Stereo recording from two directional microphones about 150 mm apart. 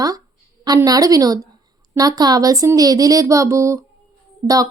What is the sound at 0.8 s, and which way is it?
Speech, 25° right (ahead or behind).